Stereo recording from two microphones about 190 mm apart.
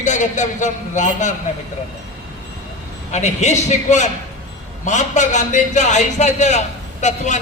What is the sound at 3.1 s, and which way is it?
A man's voice, 40° left (ahead or behind).